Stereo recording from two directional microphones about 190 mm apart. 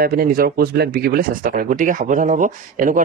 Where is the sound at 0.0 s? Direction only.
50° right (ahead or behind).